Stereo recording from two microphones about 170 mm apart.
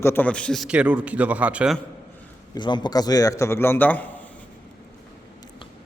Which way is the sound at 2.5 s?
25° left (ahead or behind).